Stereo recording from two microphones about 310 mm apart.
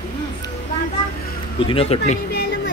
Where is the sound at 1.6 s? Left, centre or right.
Centre.